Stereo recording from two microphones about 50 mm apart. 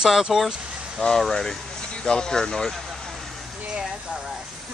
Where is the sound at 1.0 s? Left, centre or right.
Centre.